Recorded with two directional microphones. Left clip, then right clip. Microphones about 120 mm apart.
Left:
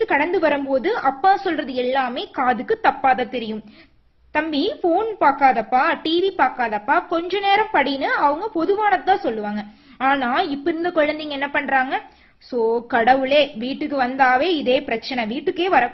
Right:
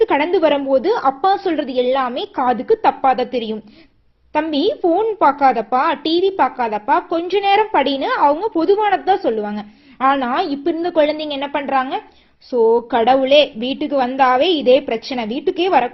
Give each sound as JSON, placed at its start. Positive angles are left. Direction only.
{"t": 0.0, "sound": "a woman's voice", "side_deg": -20}